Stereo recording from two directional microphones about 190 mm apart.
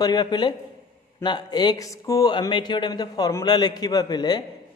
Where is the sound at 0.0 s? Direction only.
20° left (ahead or behind).